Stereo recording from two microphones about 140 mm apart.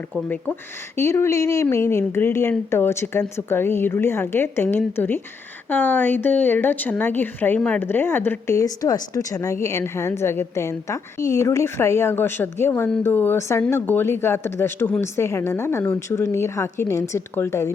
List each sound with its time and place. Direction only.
0.9 s a woman's voice: 20° left (ahead or behind)